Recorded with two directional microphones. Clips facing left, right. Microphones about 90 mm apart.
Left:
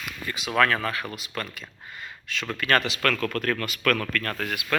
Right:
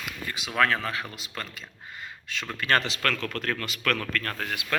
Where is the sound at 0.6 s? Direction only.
15° right (ahead or behind).